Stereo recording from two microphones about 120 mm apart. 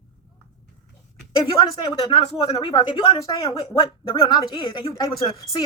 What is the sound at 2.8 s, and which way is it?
Wail, 45° left (ahead or behind).